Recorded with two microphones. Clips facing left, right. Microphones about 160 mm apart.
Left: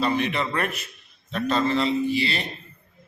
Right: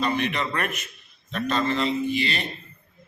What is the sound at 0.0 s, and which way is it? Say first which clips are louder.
A man's voice: left 1 dB; 30° left (ahead or behind).